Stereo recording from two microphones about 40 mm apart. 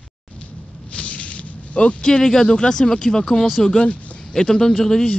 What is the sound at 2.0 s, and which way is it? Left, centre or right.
A man's voice, centre.